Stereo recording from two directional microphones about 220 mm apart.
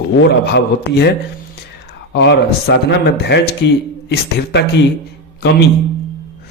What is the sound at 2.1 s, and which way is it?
Speech, 50° left (ahead or behind).